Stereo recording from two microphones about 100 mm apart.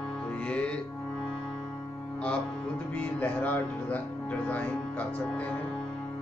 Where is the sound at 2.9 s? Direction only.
15° left (ahead or behind).